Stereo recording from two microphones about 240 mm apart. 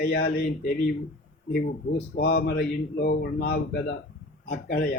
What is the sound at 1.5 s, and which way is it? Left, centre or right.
A man's voice, left.